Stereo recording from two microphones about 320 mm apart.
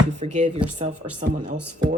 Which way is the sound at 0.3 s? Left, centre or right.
Right.